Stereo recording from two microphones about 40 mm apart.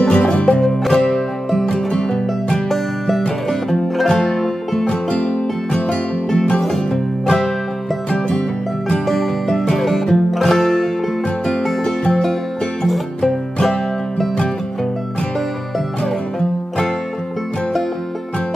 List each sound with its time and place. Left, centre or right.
0.0 s music: left
0.6 s music: centre
1.9 s music: centre
2.7 s music: centre
4.8 s music: left
6.9 s music: centre
8.1 s music: left
9.0 s music: centre
16.0 s music: centre